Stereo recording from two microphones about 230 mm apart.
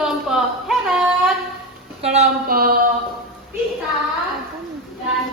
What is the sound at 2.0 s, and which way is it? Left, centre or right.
Speech, right.